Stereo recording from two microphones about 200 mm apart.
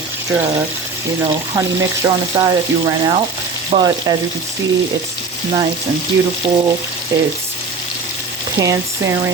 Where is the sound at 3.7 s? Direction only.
30° right (ahead or behind).